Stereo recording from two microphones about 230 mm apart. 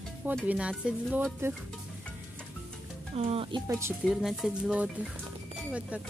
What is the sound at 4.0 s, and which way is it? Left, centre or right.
Speech, centre.